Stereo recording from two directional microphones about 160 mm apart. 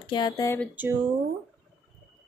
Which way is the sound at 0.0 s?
30° left (ahead or behind).